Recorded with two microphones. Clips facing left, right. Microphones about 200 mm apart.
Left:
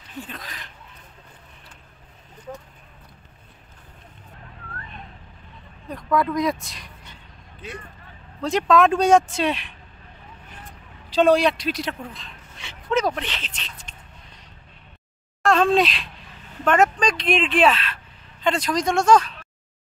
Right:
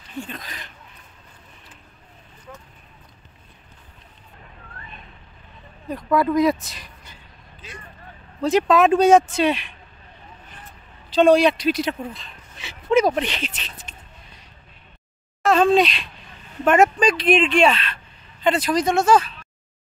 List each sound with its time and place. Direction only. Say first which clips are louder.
0.2 s speech: right 3 dB; centre (ahead or behind)
5.9 s speech: right 2 dB; 5° right (ahead or behind)
7.6 s speech: left 6 dB; 60° left (ahead or behind)
8.4 s speech: right 2 dB; 5° right (ahead or behind)
11.1 s speech: right 3 dB; 5° left (ahead or behind)
12.9 s speech: right 5 dB; 15° right (ahead or behind)
13.7 s a sound: right 2 dB; 5° right (ahead or behind)
15.4 s speech: right 2 dB; centre (ahead or behind)